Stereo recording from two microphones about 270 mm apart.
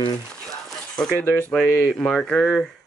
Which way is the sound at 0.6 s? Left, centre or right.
Centre.